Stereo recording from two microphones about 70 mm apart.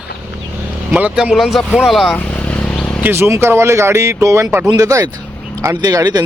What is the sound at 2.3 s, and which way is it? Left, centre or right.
Vehicle, centre.